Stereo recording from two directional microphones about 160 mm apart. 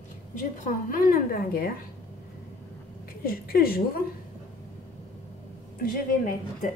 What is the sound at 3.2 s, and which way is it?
Speech, 65° left (ahead or behind).